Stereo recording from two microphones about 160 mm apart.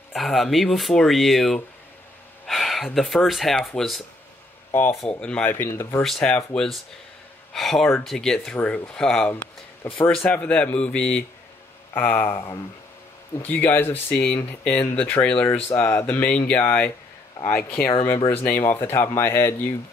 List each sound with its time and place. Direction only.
0.1 s speech: centre (ahead or behind)
4.7 s speech: 10° left (ahead or behind)
6.0 s speech: 5° left (ahead or behind)
13.4 s speech: 10° left (ahead or behind)